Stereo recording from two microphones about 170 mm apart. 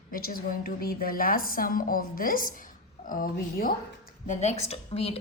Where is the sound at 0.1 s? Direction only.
60° left (ahead or behind).